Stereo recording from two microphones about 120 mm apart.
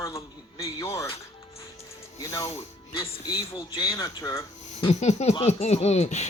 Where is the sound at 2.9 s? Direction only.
50° left (ahead or behind).